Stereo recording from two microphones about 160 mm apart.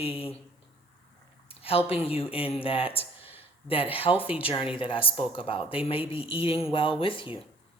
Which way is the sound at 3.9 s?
35° left (ahead or behind).